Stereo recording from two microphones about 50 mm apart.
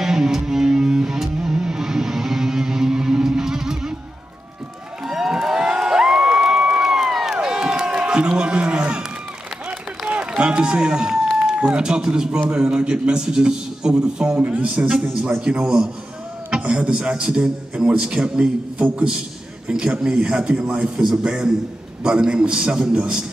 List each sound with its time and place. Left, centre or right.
0.0 s music: centre
5.0 s a sound: centre
7.3 s crowd: centre
8.1 s music: centre
9.7 s run: right
11.6 s a man's voice: centre